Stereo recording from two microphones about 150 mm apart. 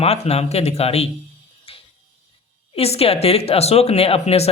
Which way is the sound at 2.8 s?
40° left (ahead or behind).